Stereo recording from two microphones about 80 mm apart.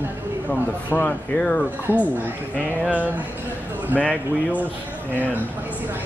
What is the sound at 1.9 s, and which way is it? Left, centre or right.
Speech, right.